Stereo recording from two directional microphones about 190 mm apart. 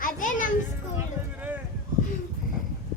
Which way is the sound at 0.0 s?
45° left (ahead or behind).